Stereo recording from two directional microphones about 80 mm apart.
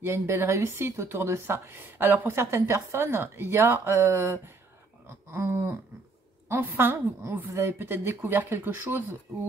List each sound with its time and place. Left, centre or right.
0.0 s a woman's voice: right